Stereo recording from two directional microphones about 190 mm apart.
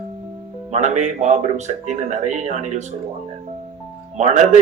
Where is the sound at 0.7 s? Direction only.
40° right (ahead or behind).